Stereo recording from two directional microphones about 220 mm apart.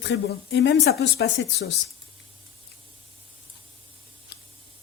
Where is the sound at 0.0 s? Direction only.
55° left (ahead or behind).